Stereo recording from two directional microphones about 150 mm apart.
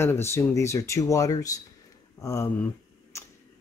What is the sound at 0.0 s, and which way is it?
Speech, 15° left (ahead or behind).